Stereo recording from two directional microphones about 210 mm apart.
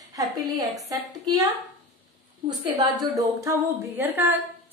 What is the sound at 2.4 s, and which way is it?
A woman's voice, 20° right (ahead or behind).